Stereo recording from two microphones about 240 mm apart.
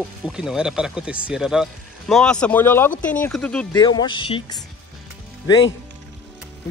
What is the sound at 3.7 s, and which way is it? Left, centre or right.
Speech, centre.